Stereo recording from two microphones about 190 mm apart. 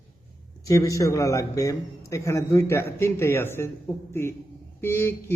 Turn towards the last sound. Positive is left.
turn(degrees=15)  # may be behind; listen again after turning